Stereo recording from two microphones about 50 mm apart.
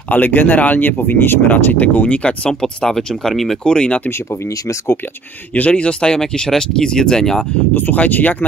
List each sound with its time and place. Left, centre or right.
0.1 s speech: left
1.5 s speech: left
2.6 s speech: centre
3.6 s speech: centre
5.5 s speech: left
7.7 s speech: left